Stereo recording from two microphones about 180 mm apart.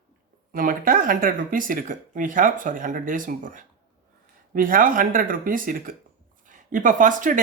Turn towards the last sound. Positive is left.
turn(degrees=-45)  # may be behind; listen again after turning